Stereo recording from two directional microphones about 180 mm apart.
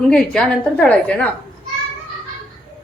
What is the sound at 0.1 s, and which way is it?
A woman's voice, 5° left (ahead or behind).